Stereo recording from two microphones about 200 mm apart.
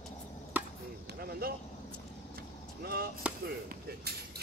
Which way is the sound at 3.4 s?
50° right (ahead or behind).